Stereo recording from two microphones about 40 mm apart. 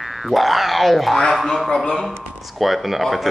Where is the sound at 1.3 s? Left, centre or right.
Centre.